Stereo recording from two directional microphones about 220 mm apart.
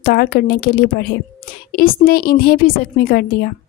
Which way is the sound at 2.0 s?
40° left (ahead or behind).